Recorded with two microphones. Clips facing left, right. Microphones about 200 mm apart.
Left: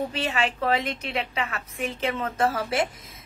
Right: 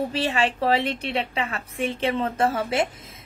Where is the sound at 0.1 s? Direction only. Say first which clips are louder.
Right 3 dB; 35° right (ahead or behind).